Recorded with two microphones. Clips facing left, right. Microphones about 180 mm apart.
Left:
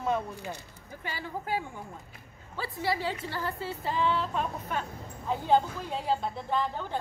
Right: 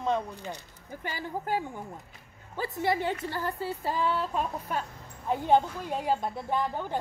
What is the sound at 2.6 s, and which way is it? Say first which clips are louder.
Speech: right 4 dB; 50° right (ahead or behind).